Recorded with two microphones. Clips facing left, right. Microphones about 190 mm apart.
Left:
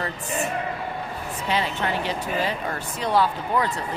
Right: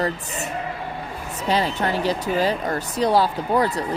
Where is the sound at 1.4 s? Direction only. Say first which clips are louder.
Right 4 dB; 40° right (ahead or behind).